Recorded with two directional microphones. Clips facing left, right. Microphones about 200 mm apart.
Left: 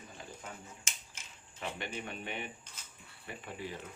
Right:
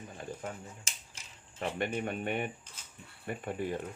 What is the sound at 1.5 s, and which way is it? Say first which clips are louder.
Speech: right 7 dB; 50° right (ahead or behind).